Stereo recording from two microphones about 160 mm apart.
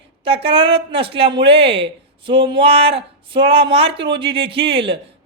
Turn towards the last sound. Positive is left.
turn(degrees=-35)  # may be behind; listen again after turning